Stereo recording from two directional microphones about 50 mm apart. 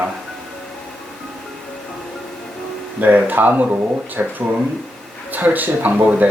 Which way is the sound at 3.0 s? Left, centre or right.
Right.